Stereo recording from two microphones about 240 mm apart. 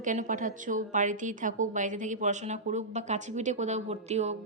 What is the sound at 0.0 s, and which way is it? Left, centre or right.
A woman's voice, right.